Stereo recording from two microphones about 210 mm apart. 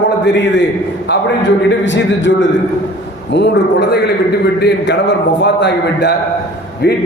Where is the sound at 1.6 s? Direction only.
60° left (ahead or behind).